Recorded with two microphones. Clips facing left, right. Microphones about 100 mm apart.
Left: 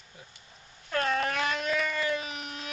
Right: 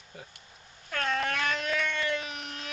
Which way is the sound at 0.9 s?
5° left (ahead or behind).